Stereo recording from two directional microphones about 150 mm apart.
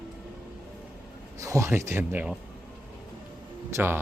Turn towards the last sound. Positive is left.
turn(degrees=-15)  # may be behind; listen again after turning